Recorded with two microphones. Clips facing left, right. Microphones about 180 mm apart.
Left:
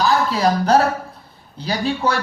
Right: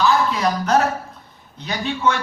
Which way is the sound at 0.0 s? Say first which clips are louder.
Left 1 dB; 35° left (ahead or behind).